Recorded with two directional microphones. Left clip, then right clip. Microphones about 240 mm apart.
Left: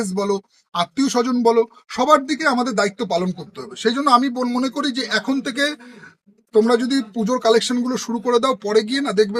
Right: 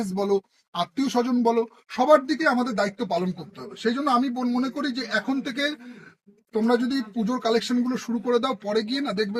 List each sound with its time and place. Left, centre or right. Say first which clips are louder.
0.0 s speech: left 3 dB; left